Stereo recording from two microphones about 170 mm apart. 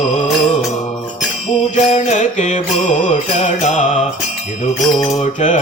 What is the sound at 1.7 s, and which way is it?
Music, 40° left (ahead or behind).